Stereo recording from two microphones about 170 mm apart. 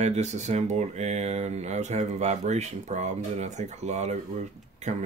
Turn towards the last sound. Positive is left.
turn(degrees=-40)  # may be behind; listen again after turning